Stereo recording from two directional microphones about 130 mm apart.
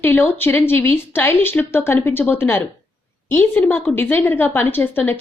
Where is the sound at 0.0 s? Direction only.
15° left (ahead or behind).